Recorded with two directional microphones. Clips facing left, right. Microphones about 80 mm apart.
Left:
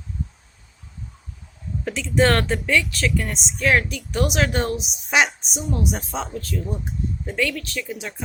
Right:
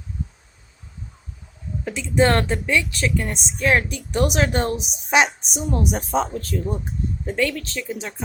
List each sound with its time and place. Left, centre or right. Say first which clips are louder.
1.8 s a woman's voice: right 1 dB; right